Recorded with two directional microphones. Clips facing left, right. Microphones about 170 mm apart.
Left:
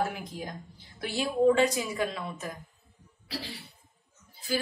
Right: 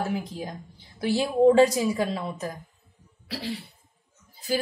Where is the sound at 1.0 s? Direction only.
35° right (ahead or behind).